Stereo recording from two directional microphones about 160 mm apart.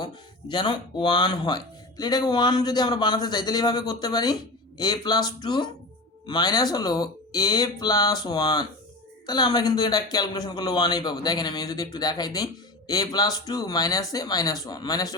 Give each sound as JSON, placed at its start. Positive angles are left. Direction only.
{"t": 0.0, "sound": "speech", "side_deg": 30}